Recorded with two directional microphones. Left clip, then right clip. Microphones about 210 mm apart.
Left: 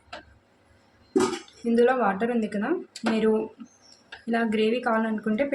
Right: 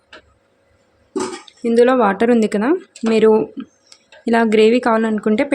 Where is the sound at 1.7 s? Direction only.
50° right (ahead or behind).